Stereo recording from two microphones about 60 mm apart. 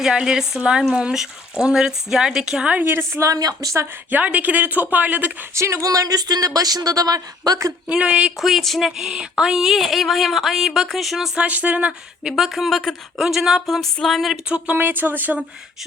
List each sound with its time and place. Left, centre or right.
0.0 s speech: centre
2.7 s speech: right
3.2 s speech: right
4.1 s speech: right
5.5 s speech: right
5.8 s speech: right
7.9 s speech: centre
8.4 s a sound: centre
11.3 s speech: right
12.2 s a sound: centre
14.8 s speech: right